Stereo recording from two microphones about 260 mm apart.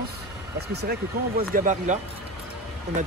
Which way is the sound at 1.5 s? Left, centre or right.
Right.